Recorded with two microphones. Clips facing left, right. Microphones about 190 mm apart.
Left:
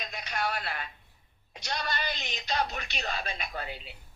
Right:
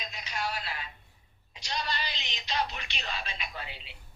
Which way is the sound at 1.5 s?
55° left (ahead or behind).